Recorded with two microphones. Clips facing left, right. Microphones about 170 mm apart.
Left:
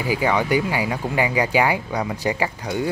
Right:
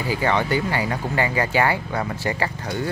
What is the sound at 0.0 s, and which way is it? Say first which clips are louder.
Speech: left 1 dB; 10° left (ahead or behind).